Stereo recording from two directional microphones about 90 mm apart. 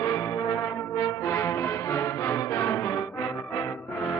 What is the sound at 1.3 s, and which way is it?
Music, 30° left (ahead or behind).